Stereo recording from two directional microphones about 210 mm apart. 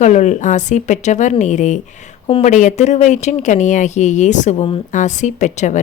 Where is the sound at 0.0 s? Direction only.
35° left (ahead or behind).